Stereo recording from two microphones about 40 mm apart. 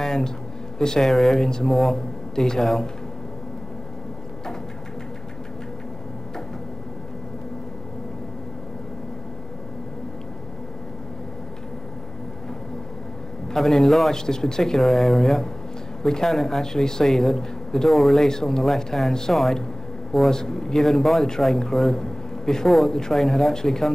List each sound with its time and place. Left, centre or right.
0.0 s a sound: centre
0.7 s a man's voice: centre
13.5 s a man's voice: centre
14.8 s a man's voice: centre
17.8 s speech: centre
18.2 s a man's voice: centre
22.0 s a sound: centre
22.8 s a man's voice: centre